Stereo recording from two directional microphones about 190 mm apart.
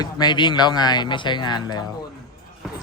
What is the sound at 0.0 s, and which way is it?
Speech, 20° left (ahead or behind).